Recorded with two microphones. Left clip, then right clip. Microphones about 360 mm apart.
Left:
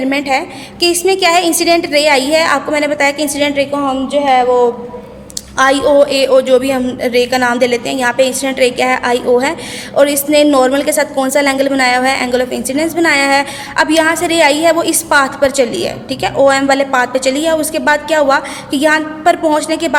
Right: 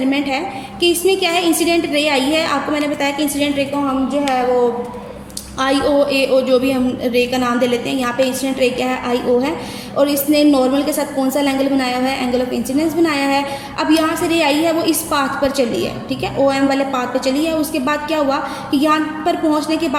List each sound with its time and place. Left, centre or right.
0.1 s a woman's voice: centre
5.5 s a woman's voice: centre